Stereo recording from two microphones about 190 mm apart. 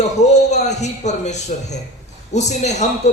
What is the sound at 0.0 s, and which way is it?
A man's voice, 35° left (ahead or behind).